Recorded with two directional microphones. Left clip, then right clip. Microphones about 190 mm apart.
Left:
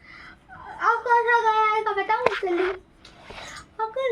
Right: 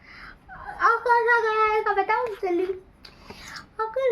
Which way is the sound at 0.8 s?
15° right (ahead or behind).